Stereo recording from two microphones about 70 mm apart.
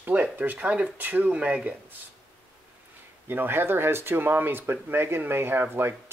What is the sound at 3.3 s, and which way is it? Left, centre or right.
Speech, right.